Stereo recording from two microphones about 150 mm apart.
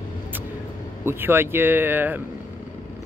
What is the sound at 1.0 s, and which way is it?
Speech, 15° right (ahead or behind).